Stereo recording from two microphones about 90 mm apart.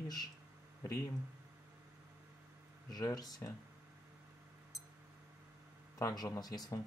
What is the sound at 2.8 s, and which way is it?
Speech, 45° left (ahead or behind).